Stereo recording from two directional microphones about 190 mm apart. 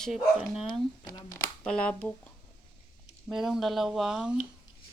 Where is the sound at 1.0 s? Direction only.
20° left (ahead or behind).